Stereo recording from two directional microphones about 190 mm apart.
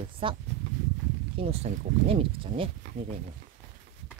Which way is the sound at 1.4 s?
35° right (ahead or behind).